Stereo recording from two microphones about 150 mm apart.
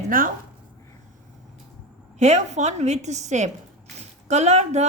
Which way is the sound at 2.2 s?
50° right (ahead or behind).